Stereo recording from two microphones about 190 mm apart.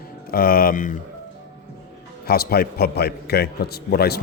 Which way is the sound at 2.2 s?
55° left (ahead or behind).